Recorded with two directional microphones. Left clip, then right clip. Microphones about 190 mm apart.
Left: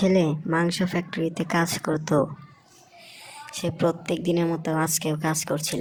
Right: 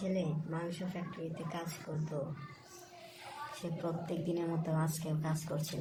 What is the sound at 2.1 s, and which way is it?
Speech, 50° left (ahead or behind).